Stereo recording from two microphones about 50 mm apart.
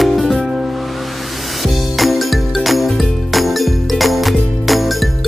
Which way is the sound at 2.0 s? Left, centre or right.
Centre.